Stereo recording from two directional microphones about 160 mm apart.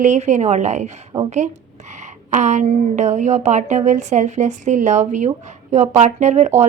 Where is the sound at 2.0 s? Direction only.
50° right (ahead or behind).